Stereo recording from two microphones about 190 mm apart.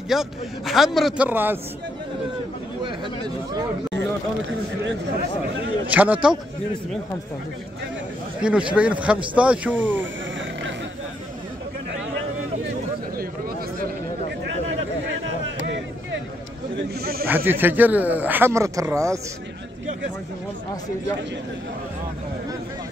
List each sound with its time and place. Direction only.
0.1 s a man's voice: centre (ahead or behind)
5.9 s speech: 10° right (ahead or behind)
8.4 s speech: 5° right (ahead or behind)
16.7 s snake: 55° right (ahead or behind)
17.5 s speech: 10° right (ahead or behind)